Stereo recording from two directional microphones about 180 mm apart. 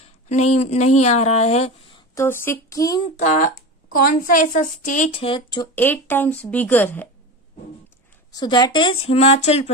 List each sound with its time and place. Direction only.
0.0 s speech: 40° left (ahead or behind)
2.1 s a woman's voice: 15° left (ahead or behind)
3.2 s a woman's voice: 40° left (ahead or behind)
5.2 s speech: 25° left (ahead or behind)
5.8 s a woman's voice: 10° left (ahead or behind)
8.4 s speech: 25° left (ahead or behind)